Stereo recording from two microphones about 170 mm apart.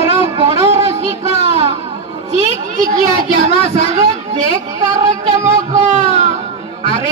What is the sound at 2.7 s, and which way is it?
Speech, 45° right (ahead or behind).